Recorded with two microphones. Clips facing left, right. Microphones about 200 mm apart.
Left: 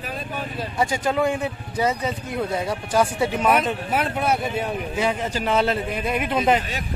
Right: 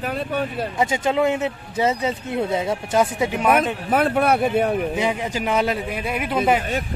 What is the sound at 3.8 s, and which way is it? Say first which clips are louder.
Speech: right 5 dB; 50° right (ahead or behind).